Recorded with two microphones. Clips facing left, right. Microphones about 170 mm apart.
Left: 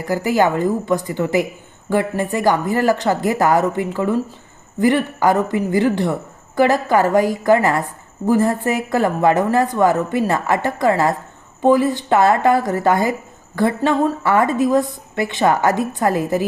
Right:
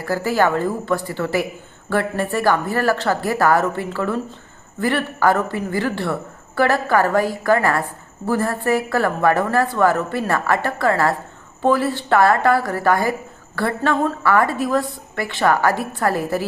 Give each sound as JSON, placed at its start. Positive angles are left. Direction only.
{"t": 0.0, "sound": "speech", "side_deg": 15}